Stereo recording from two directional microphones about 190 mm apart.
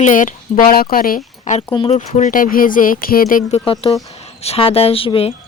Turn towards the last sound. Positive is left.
turn(degrees=30)  # may be behind; listen again after turning